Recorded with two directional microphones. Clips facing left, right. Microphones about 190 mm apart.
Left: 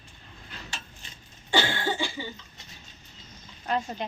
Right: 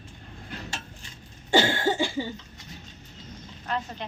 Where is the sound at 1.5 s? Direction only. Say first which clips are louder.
Right 4 dB; 45° right (ahead or behind).